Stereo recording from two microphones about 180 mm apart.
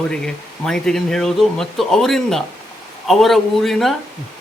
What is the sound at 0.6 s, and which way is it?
Speech, 5° left (ahead or behind).